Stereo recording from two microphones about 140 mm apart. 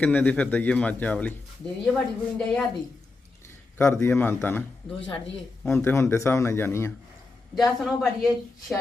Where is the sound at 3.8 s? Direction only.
20° left (ahead or behind).